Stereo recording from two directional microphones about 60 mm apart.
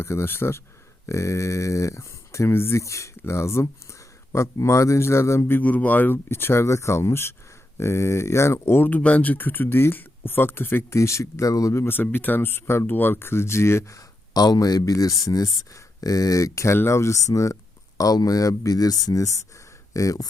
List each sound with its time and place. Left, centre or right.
0.0 s speech: left
1.0 s speech: left
2.8 s speech: left
5.5 s speech: left
8.6 s speech: left
8.9 s speech: left
10.9 s speech: left
11.7 s speech: left
14.3 s speech: left
15.2 s speech: left
16.7 s speech: left